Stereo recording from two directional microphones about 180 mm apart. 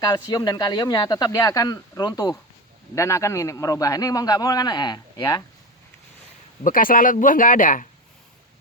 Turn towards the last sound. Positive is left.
turn(degrees=45)  # may be behind; listen again after turning